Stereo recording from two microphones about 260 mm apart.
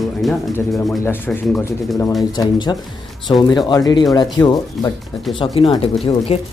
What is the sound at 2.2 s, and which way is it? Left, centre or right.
Speech, centre.